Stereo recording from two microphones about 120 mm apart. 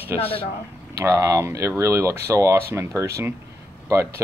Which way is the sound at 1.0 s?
25° right (ahead or behind).